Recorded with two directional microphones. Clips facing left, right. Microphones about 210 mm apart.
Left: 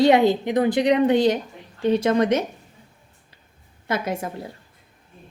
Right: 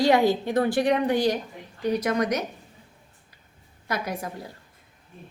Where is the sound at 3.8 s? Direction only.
25° left (ahead or behind).